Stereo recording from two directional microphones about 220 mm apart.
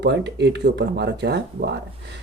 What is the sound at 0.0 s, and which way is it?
Speech, 50° right (ahead or behind).